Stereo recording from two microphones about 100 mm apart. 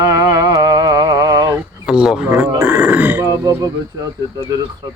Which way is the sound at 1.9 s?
5° right (ahead or behind).